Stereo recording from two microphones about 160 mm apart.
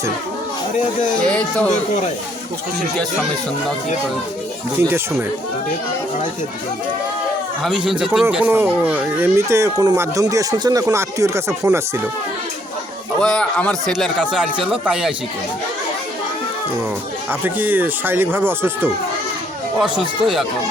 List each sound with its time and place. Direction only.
1.2 s speech: 5° left (ahead or behind)
4.8 s speech: 15° right (ahead or behind)
7.6 s speech: centre (ahead or behind); by 11.8 s 15° right (ahead or behind)
13.2 s speech: 5° left (ahead or behind)
17.4 s speech: 10° right (ahead or behind)
19.8 s speech: centre (ahead or behind)